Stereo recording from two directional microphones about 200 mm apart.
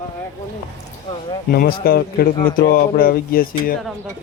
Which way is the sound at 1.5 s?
50° left (ahead or behind).